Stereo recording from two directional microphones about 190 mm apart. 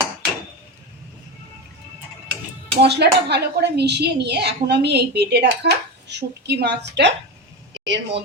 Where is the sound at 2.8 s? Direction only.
60° right (ahead or behind).